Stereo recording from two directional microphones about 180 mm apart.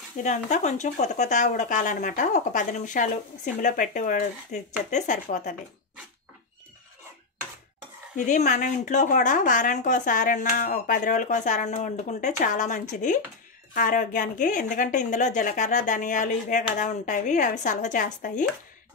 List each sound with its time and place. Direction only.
0.2 s speech: 40° left (ahead or behind)
8.3 s speech: 40° left (ahead or behind)